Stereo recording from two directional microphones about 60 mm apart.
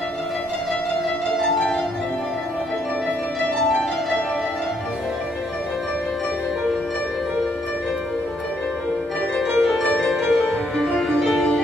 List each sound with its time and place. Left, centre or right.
9.4 s music: centre